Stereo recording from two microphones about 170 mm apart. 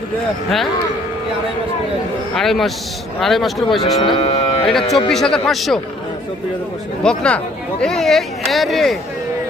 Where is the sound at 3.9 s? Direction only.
30° left (ahead or behind).